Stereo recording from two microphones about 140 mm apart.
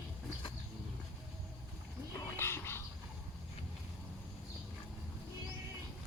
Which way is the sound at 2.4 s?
15° left (ahead or behind).